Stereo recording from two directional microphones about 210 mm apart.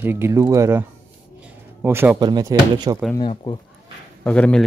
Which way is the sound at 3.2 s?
20° left (ahead or behind).